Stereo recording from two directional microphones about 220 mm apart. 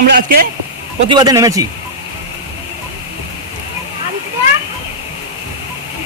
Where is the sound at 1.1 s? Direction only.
15° right (ahead or behind).